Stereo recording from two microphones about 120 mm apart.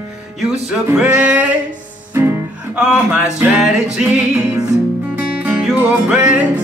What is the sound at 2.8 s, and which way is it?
Music, 10° right (ahead or behind).